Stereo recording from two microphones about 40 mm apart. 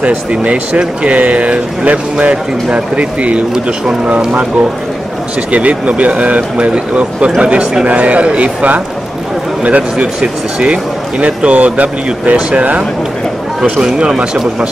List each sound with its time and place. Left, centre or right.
0.0 s speech: right
5.5 s speech: right
13.7 s speech: right